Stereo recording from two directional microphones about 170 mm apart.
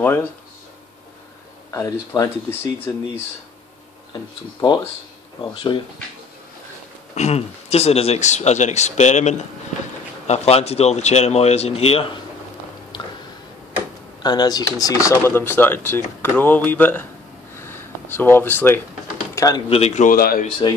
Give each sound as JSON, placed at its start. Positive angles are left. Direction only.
{"t": 0.0, "sound": "speech", "side_deg": 10}
{"t": 1.7, "sound": "speech", "side_deg": 20}
{"t": 4.1, "sound": "speech", "side_deg": 25}
{"t": 7.2, "sound": "speech", "side_deg": 40}
{"t": 14.2, "sound": "speech", "side_deg": 25}
{"t": 17.6, "sound": "a sound", "side_deg": 15}
{"t": 19.7, "sound": "speech", "side_deg": 40}
{"t": 20.1, "sound": "speech", "side_deg": 60}